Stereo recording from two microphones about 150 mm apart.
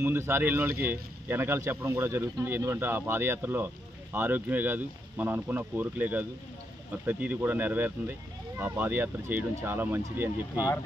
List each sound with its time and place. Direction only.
0.0 s speech: 15° right (ahead or behind)
10.5 s speech: 25° left (ahead or behind)